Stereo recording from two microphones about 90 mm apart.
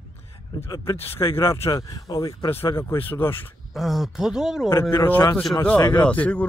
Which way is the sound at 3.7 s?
5° right (ahead or behind).